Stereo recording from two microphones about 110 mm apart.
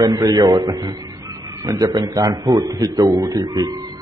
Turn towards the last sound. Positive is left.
turn(degrees=-35)  # may be behind; listen again after turning